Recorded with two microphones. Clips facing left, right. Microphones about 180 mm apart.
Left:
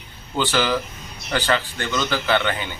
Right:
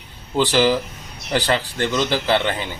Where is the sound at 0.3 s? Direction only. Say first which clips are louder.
Right 4 dB; 35° right (ahead or behind).